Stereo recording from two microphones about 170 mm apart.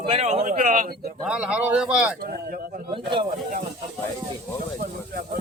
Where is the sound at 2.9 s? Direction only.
30° right (ahead or behind).